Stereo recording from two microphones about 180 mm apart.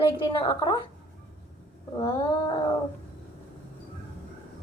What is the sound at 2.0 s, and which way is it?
Speech, 25° left (ahead or behind).